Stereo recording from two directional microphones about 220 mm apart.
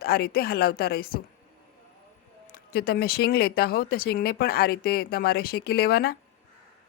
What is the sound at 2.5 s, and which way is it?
Speech, 45° left (ahead or behind).